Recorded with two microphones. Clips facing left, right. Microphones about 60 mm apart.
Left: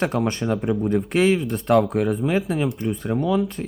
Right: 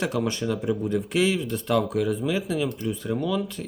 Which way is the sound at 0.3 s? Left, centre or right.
Left.